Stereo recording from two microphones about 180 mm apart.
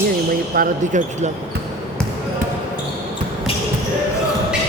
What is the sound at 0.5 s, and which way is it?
Speech, 50° right (ahead or behind).